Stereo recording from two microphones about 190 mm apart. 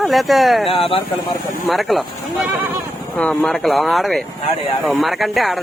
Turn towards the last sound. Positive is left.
turn(degrees=0)  # may be behind; listen again after turning